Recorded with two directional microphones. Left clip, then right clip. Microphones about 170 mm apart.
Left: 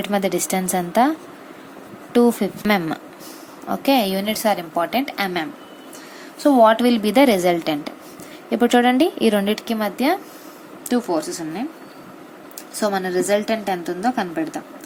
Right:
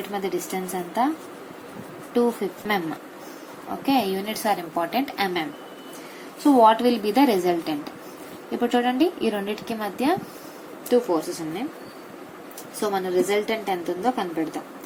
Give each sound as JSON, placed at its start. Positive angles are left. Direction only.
{"t": 0.0, "sound": "a woman's voice", "side_deg": 65}
{"t": 2.1, "sound": "a woman's voice", "side_deg": 70}
{"t": 3.7, "sound": "a woman's voice", "side_deg": 55}
{"t": 8.4, "sound": "a woman's voice", "side_deg": 65}
{"t": 12.8, "sound": "a woman's voice", "side_deg": 60}